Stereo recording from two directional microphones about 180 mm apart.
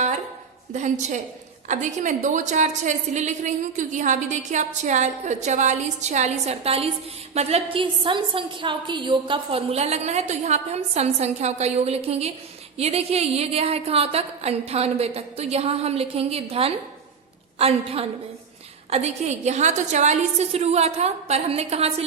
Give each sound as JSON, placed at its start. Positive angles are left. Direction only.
{"t": 0.7, "sound": "a woman's voice", "side_deg": -40}